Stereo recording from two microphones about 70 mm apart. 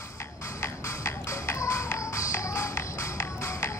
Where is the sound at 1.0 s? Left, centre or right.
Left.